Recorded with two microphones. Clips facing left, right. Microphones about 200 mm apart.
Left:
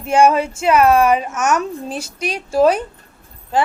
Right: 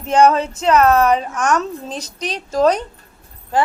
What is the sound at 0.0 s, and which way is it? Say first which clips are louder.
A woman's voice: even; 10° left (ahead or behind).